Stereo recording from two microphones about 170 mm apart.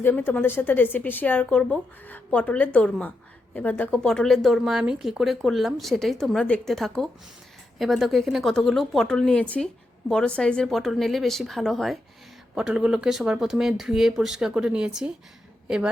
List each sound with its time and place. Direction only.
0.0 s a woman's voice: 10° left (ahead or behind); by 15.9 s 5° right (ahead or behind)